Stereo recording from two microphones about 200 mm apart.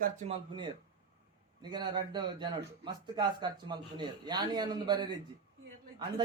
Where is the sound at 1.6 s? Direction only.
20° right (ahead or behind).